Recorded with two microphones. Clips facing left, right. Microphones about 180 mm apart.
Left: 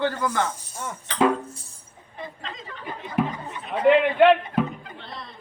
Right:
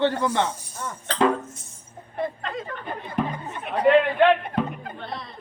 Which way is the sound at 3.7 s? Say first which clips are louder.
Even; 5° left (ahead or behind).